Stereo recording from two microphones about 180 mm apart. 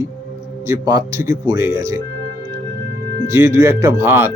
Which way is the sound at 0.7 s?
20° right (ahead or behind).